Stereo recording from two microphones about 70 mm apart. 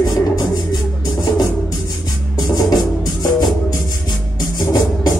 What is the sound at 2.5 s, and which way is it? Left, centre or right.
Music, left.